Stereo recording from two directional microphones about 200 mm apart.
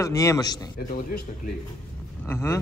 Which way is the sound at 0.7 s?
45° left (ahead or behind).